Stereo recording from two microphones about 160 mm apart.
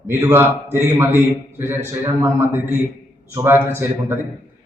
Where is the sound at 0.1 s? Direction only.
15° right (ahead or behind).